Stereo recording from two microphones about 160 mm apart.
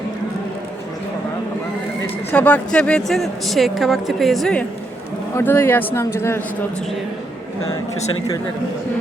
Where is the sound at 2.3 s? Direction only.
10° left (ahead or behind).